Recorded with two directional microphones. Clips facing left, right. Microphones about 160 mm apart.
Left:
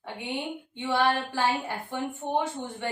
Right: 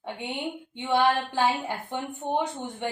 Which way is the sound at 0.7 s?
20° right (ahead or behind).